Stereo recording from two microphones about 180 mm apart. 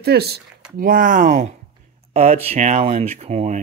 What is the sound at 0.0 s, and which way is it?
Speech, 65° right (ahead or behind).